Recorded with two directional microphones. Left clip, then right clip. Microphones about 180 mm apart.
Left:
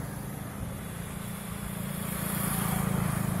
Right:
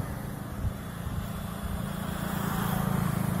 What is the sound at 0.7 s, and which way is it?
Vehicle, 35° left (ahead or behind).